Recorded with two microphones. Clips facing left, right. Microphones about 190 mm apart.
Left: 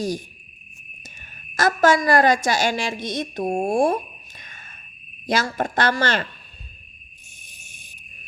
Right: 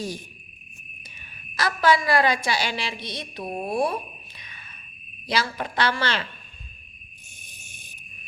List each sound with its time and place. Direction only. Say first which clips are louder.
1.0 s a woman's voice: left 3 dB; 45° left (ahead or behind)